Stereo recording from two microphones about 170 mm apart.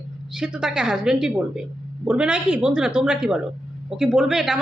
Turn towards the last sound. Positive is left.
turn(degrees=0)  # may be behind; listen again after turning